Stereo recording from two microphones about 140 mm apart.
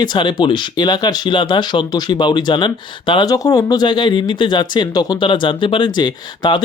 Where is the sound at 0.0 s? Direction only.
30° left (ahead or behind).